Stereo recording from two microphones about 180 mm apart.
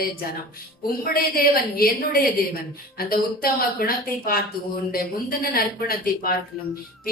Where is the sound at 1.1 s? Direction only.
55° left (ahead or behind).